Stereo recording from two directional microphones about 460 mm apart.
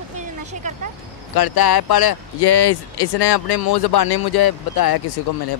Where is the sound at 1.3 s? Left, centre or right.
Left.